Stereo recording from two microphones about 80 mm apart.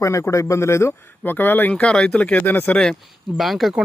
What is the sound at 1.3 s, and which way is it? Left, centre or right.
Speech, left.